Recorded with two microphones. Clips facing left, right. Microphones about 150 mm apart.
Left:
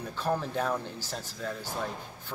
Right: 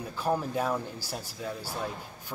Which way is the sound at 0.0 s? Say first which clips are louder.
Right 1 dB; 10° right (ahead or behind).